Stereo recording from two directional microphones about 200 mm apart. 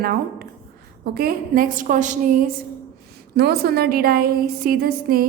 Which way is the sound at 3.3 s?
50° right (ahead or behind).